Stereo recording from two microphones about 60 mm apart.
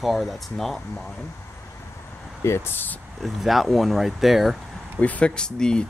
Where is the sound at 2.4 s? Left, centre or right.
Left.